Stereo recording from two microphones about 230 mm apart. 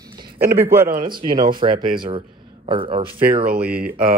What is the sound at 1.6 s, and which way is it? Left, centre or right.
Speech, right.